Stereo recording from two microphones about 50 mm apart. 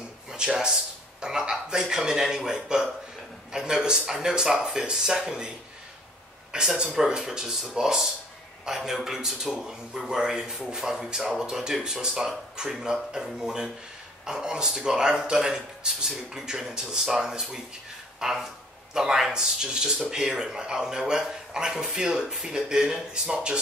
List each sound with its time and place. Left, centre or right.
0.3 s speech: centre
6.5 s speech: centre